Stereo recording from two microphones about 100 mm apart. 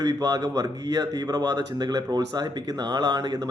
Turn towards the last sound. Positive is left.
turn(degrees=-40)  # may be behind; listen again after turning